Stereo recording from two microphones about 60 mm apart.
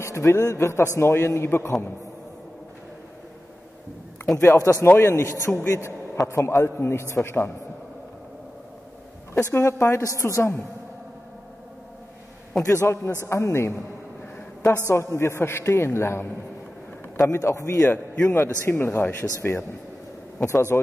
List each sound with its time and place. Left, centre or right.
0.0 s a man's voice: left
4.6 s a man's voice: left
5.0 s a man's voice: left
9.3 s a man's voice: left
12.6 s a man's voice: left
14.9 s a man's voice: left
17.2 s a man's voice: left
17.9 s a man's voice: left
18.7 s speech: left
20.4 s a man's voice: left